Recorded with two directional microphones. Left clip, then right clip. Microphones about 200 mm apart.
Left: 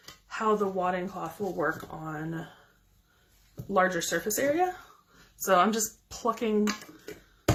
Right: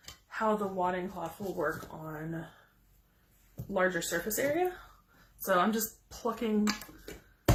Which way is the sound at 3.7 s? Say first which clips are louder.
Left 4 dB; 50° left (ahead or behind).